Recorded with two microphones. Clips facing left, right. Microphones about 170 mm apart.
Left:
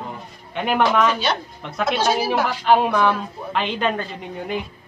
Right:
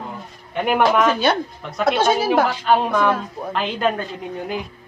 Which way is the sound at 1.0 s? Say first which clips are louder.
Right 3 dB; 55° right (ahead or behind).